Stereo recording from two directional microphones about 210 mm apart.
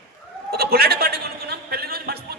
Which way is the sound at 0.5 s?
50° right (ahead or behind).